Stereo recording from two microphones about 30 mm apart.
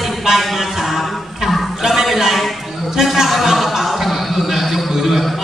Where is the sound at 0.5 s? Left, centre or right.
Centre.